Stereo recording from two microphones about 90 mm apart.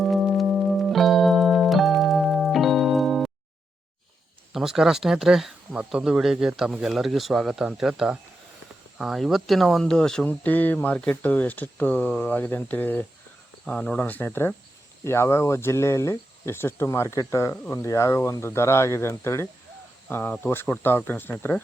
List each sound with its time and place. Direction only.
0.0 s music: centre (ahead or behind)
4.5 s speech: 5° right (ahead or behind)
10.2 s speech: 20° left (ahead or behind)